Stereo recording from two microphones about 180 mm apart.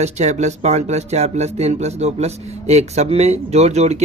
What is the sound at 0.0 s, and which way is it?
Speech, 40° right (ahead or behind).